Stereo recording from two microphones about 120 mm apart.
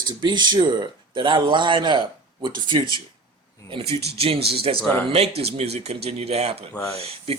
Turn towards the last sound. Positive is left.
turn(degrees=-55)  # may be behind; listen again after turning